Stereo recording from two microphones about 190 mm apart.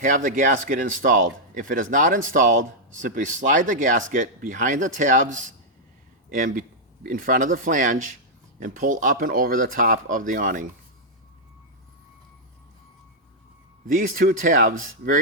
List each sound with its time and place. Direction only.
0.0 s speech: 45° right (ahead or behind)
13.8 s speech: 45° right (ahead or behind)